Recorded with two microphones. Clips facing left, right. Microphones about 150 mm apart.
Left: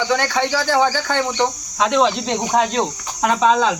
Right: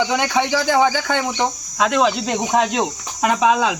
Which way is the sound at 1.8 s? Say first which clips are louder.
Left 1 dB; 5° right (ahead or behind).